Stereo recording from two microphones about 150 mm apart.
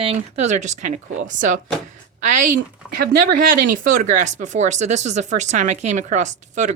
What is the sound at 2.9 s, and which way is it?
A woman's voice, 90° right.